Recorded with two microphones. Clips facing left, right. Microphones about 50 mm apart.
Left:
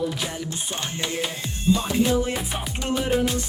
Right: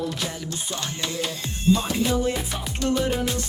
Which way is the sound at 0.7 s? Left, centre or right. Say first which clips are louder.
Left 1 dB; left.